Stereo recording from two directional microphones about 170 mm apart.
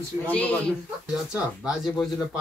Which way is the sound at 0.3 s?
10° left (ahead or behind).